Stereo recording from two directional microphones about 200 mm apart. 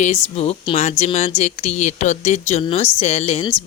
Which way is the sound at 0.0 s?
30° left (ahead or behind).